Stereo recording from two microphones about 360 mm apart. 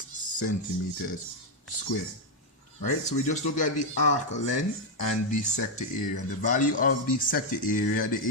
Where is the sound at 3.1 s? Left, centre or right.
Centre.